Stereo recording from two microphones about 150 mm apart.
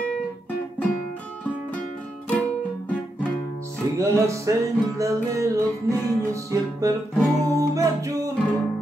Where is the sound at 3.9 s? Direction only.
20° right (ahead or behind).